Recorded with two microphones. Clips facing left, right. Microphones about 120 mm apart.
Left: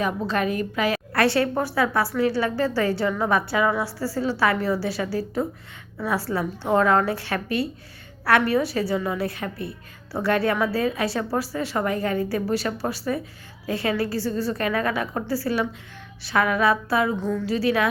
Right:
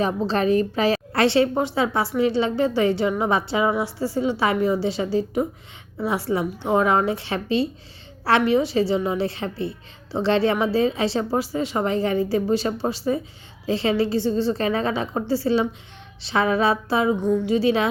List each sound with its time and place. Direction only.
0.0 s a woman's voice: 30° right (ahead or behind)